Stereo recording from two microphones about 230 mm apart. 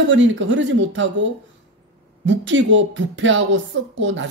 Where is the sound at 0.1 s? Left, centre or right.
Right.